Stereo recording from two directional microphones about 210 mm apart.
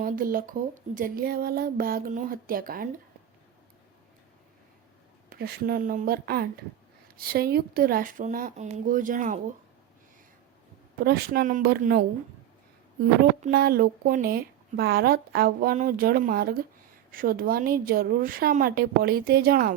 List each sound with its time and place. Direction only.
0.0 s a woman's voice: 40° right (ahead or behind)
5.3 s a woman's voice: 50° right (ahead or behind)
11.0 s a woman's voice: 45° right (ahead or behind)
13.4 s a woman's voice: 45° right (ahead or behind)